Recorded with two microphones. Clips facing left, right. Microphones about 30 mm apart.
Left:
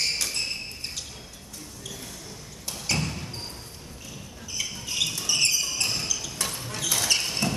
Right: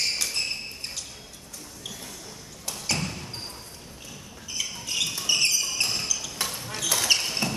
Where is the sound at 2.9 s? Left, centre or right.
Centre.